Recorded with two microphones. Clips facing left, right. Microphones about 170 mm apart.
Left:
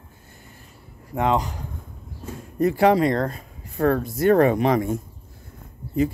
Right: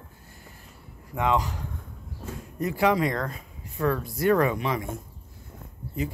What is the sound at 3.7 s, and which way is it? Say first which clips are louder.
Speech: left 6 dB; 50° left (ahead or behind).